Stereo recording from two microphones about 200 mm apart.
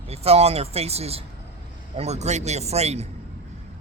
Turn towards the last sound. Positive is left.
turn(degrees=-30)  # may be behind; listen again after turning